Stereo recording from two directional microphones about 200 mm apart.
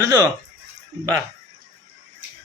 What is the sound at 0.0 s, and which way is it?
Speech, 15° right (ahead or behind).